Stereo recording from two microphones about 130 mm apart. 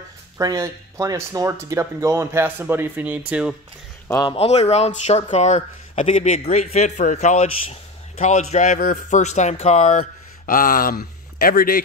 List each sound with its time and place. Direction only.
0.4 s speech: 25° right (ahead or behind); by 3.5 s 10° right (ahead or behind)
4.3 s speech: 55° left (ahead or behind); by 11.0 s 90° left